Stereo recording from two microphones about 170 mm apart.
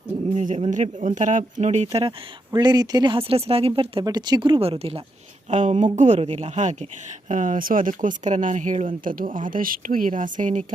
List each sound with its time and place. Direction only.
0.3 s speech: 40° right (ahead or behind)
2.0 s speech: 25° right (ahead or behind); by 10.6 s 50° right (ahead or behind)